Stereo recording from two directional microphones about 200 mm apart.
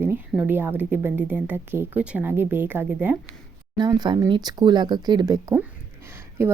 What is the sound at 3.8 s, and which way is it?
Speech, 20° right (ahead or behind).